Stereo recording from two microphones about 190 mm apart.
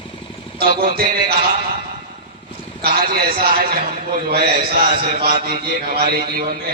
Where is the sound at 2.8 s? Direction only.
55° right (ahead or behind).